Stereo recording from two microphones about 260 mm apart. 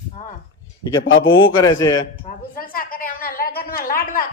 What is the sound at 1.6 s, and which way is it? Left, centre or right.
Speech, centre.